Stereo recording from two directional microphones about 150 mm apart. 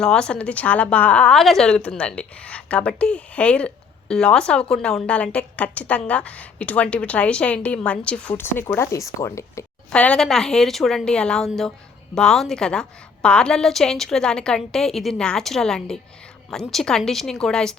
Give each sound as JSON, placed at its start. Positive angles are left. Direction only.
{"t": 0.0, "sound": "a woman's voice", "side_deg": 5}
{"t": 9.9, "sound": "a woman's voice", "side_deg": 5}